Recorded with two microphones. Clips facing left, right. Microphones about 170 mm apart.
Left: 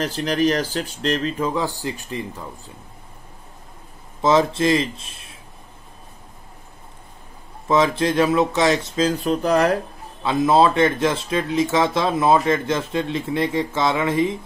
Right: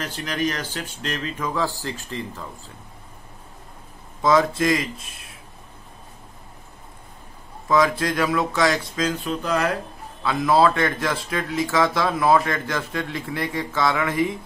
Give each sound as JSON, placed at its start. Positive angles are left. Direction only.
{"t": 0.0, "sound": "speech", "side_deg": 35}
{"t": 1.5, "sound": "speech", "side_deg": 20}
{"t": 4.2, "sound": "speech", "side_deg": 25}
{"t": 7.6, "sound": "speech", "side_deg": 25}
{"t": 10.2, "sound": "speech", "side_deg": 25}